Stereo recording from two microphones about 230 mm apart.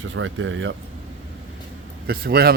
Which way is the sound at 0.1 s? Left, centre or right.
Right.